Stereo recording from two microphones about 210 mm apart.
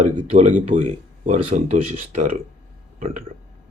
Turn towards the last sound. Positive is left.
turn(degrees=-35)  # may be behind; listen again after turning